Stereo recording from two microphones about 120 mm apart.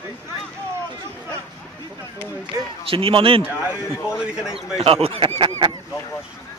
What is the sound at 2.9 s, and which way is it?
Speech, 50° right (ahead or behind).